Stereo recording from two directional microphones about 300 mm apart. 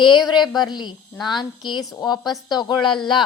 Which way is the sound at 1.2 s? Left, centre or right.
Centre.